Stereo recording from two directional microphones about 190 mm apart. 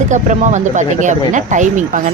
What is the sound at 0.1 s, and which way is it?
Speech, 40° right (ahead or behind).